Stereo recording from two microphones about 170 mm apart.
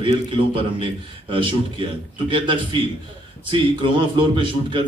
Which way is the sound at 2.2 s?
30° right (ahead or behind).